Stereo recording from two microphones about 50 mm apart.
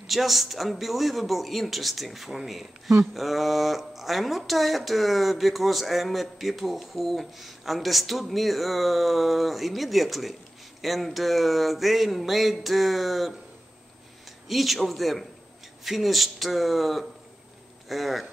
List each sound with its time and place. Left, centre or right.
0.0 s speech: centre
14.5 s speech: centre